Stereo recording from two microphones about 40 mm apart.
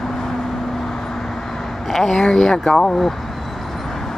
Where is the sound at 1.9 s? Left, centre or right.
Centre.